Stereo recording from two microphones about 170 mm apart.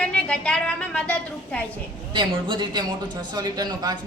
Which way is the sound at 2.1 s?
30° right (ahead or behind).